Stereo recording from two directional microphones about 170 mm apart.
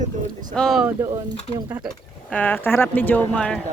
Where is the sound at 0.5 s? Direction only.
Centre (ahead or behind).